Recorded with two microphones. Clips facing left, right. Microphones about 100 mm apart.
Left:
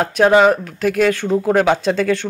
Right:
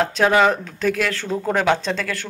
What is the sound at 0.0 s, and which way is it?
Speech, 15° left (ahead or behind).